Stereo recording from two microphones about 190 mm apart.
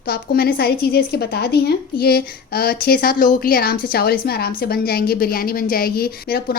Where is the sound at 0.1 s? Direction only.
55° left (ahead or behind).